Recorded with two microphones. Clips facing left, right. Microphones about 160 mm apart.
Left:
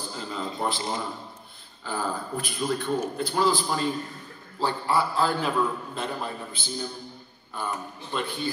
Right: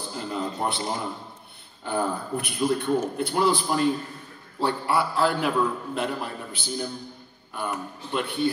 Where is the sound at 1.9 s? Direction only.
65° right (ahead or behind).